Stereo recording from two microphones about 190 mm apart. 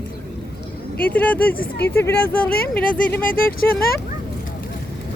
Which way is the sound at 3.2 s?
50° left (ahead or behind).